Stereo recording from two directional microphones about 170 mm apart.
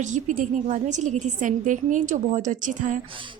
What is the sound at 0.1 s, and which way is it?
A woman's voice, 45° right (ahead or behind).